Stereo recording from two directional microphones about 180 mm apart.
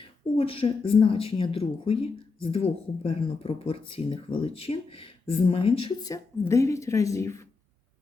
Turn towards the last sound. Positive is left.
turn(degrees=15)  # may be behind; listen again after turning